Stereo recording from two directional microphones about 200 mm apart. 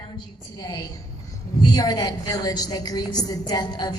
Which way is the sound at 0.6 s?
20° left (ahead or behind).